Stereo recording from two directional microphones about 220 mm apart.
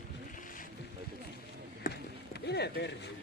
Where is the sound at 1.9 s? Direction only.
50° left (ahead or behind).